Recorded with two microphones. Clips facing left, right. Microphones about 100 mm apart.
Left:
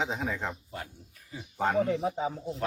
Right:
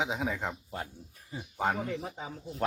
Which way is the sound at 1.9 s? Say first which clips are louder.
Left 8 dB; 30° left (ahead or behind).